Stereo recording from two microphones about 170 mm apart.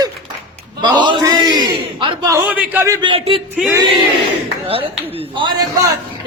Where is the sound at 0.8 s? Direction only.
25° right (ahead or behind).